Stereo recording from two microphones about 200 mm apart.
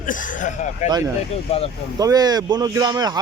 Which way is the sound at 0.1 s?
40° left (ahead or behind).